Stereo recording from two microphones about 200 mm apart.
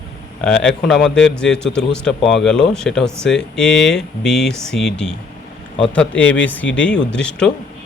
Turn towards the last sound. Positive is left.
turn(degrees=5)  # may be behind; listen again after turning